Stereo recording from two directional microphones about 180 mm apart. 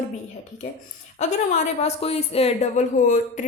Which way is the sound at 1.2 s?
40° left (ahead or behind).